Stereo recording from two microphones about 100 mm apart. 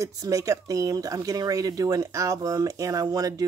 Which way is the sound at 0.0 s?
35° right (ahead or behind).